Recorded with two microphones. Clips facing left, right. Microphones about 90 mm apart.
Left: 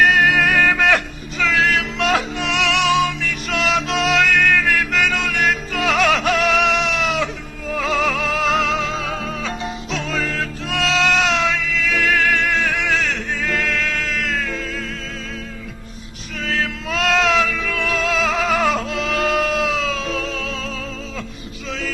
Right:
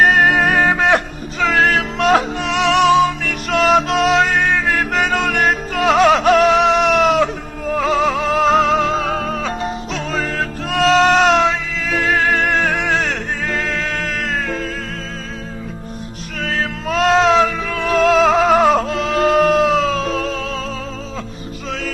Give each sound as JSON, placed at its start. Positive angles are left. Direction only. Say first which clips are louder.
{"t": 0.0, "sound": "music", "louder": "right 2 dB", "side_deg": -40}
{"t": 1.5, "sound": "music", "louder": "right 3 dB", "side_deg": -45}
{"t": 16.4, "sound": "music", "louder": "right 2 dB", "side_deg": -40}